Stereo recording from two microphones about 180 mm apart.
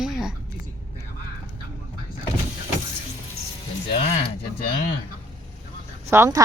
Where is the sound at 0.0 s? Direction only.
Centre (ahead or behind).